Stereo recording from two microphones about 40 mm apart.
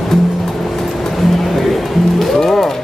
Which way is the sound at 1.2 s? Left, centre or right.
Centre.